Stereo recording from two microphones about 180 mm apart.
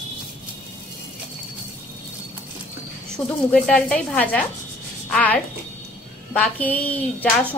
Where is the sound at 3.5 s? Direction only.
5° left (ahead or behind).